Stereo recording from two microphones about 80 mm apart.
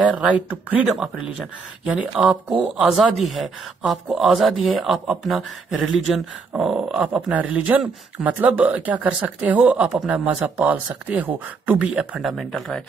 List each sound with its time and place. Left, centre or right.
0.1 s speech: centre
2.2 s speech: centre
9.8 s speech: centre
12.2 s speech: centre